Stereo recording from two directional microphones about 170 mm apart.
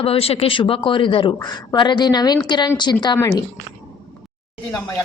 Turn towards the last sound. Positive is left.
turn(degrees=20)  # may be behind; listen again after turning